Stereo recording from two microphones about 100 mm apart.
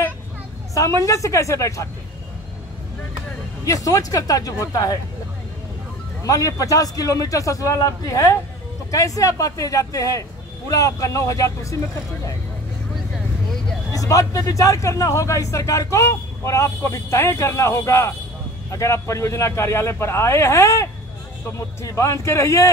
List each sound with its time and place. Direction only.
1.0 s speech: 30° left (ahead or behind)
3.6 s speech: 35° left (ahead or behind)
6.2 s speech: 35° left (ahead or behind)
13.9 s a man's voice: 35° left (ahead or behind)